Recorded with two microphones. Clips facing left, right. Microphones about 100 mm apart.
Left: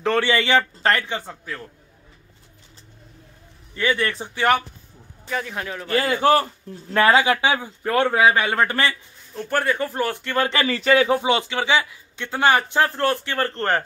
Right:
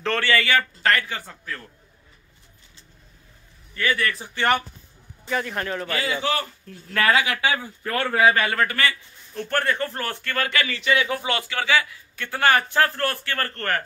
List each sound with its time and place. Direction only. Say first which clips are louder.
0.0 s a man's voice: left 3 dB; 15° left (ahead or behind)
3.7 s a man's voice: left 2 dB; 25° left (ahead or behind)
4.4 s speech: left 3 dB; centre (ahead or behind)
5.9 s a man's voice: left 9 dB; 50° left (ahead or behind)
6.4 s a man's voice: left 4 dB; 30° left (ahead or behind)
9.3 s a man's voice: left 2 dB; 10° left (ahead or behind); by 11.1 s 40° left (ahead or behind)
11.1 s a man's voice: left 5 dB; 20° left (ahead or behind)